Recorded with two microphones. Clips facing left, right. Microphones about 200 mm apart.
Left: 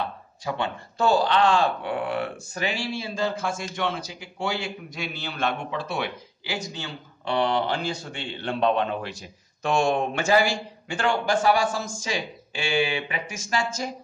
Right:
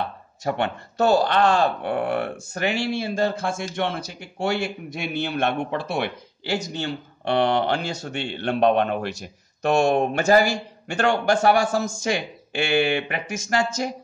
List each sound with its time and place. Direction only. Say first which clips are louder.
0.4 s a man's voice: right 4 dB; 65° right (ahead or behind)
1.2 s speech: right 2 dB; 45° right (ahead or behind); by 9.8 s 65° right (ahead or behind)
9.8 s a man's voice: right 4 dB; 40° right (ahead or behind)
10.9 s a man's voice: right 4 dB; 65° right (ahead or behind)